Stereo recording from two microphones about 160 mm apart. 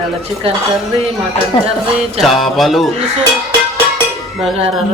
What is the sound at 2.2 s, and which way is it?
Speech, centre (ahead or behind).